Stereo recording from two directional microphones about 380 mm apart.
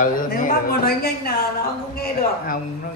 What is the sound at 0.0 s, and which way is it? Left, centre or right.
A woman's voice, left.